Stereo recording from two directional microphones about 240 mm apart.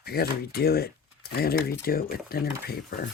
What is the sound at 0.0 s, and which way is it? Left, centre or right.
Speech, left.